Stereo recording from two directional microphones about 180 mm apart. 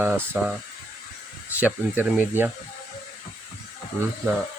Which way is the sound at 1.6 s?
10° right (ahead or behind).